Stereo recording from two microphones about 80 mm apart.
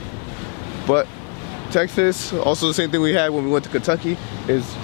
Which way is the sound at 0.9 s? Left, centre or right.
Left.